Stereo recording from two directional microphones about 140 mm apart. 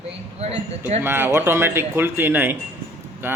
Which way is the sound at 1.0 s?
15° right (ahead or behind).